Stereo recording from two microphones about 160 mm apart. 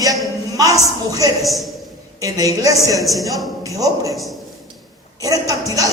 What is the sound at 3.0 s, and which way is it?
Speech, centre (ahead or behind).